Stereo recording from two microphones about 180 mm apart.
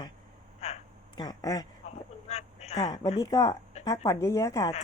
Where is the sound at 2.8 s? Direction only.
20° left (ahead or behind).